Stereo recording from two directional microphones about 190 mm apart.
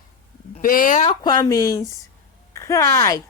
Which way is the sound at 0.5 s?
45° left (ahead or behind).